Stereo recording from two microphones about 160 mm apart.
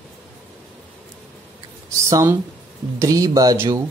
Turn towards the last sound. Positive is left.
turn(degrees=-20)  # may be behind; listen again after turning